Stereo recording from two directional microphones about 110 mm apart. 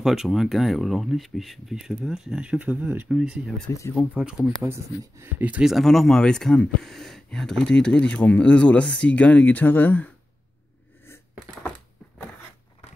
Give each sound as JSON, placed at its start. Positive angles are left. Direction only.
{"t": 0.0, "sound": "speech", "side_deg": -5}
{"t": 4.6, "sound": "speech", "side_deg": -25}
{"t": 5.4, "sound": "speech", "side_deg": -10}